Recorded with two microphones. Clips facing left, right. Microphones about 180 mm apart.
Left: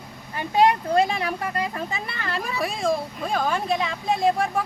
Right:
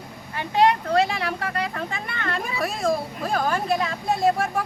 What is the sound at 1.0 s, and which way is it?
Speech, 15° left (ahead or behind).